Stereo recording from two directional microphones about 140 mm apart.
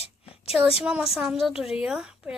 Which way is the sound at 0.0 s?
45° left (ahead or behind).